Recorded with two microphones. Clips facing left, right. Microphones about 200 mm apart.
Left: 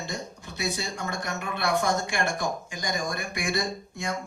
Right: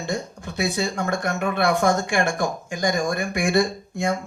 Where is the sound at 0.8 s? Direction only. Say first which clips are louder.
Right 8 dB; 50° right (ahead or behind).